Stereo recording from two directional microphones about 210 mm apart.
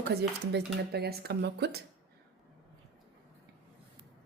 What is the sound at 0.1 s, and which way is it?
Speech, 50° right (ahead or behind).